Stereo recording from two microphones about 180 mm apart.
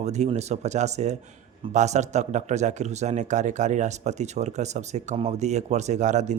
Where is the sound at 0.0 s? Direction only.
40° right (ahead or behind).